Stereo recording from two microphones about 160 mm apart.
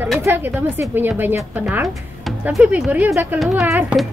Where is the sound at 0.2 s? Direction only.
15° right (ahead or behind).